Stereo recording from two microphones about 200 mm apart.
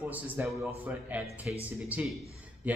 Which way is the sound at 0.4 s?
10° right (ahead or behind).